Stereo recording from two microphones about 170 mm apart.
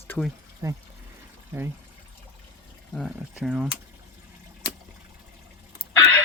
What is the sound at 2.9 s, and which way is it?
Speech, centre (ahead or behind).